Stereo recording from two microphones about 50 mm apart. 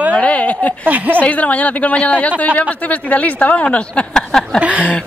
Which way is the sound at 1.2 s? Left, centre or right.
Left.